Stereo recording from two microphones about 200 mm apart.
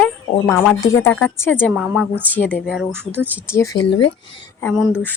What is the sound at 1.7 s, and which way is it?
Speech, 5° right (ahead or behind).